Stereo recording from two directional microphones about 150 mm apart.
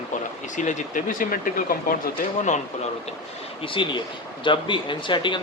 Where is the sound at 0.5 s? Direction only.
55° left (ahead or behind).